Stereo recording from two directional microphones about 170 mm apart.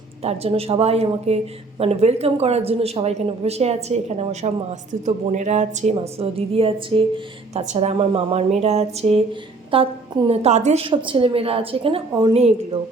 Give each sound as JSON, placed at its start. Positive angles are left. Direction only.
{"t": 0.3, "sound": "a woman's voice", "side_deg": -35}